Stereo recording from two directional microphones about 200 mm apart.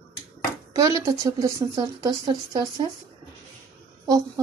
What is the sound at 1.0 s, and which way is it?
Speech, 15° right (ahead or behind).